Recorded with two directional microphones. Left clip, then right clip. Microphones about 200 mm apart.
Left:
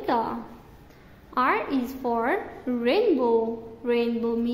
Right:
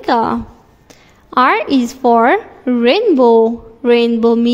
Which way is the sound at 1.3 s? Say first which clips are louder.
Right 12 dB; 50° right (ahead or behind).